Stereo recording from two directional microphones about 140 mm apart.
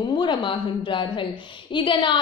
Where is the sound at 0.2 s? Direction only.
35° left (ahead or behind).